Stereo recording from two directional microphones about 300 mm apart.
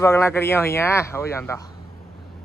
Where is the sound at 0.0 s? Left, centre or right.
Centre.